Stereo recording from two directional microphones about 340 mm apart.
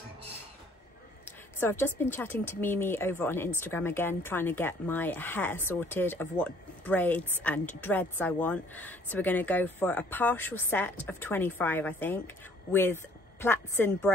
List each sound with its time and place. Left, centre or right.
1.2 s speech: centre